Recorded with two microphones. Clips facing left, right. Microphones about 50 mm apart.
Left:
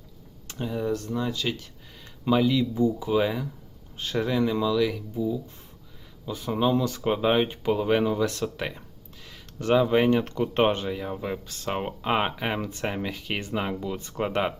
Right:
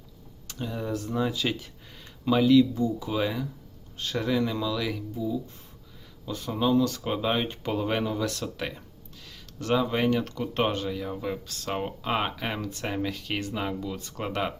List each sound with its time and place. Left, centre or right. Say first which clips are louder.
0.6 s speech: left 3 dB; centre
2.3 s speech: right 3 dB; centre
5.1 s speech: left 2 dB; centre